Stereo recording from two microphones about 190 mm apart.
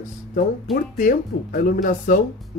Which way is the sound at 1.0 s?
45° left (ahead or behind).